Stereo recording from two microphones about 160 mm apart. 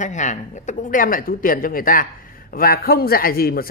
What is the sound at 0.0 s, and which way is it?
Speech, 50° left (ahead or behind).